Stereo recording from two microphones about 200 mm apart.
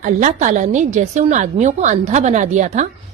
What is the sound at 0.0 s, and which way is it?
Speech, 40° right (ahead or behind).